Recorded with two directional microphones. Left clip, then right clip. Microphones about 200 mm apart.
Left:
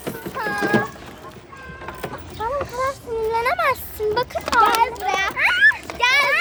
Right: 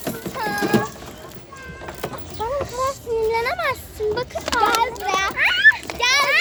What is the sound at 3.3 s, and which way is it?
A child's voice, 15° left (ahead or behind).